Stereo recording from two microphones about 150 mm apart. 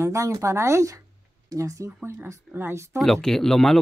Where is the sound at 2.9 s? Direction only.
Centre (ahead or behind).